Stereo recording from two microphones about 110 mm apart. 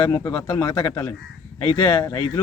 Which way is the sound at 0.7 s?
55° left (ahead or behind).